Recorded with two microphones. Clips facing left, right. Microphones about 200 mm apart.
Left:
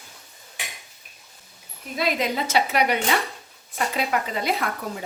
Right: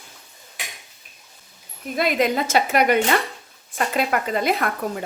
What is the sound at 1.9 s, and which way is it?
A woman's voice, 50° right (ahead or behind).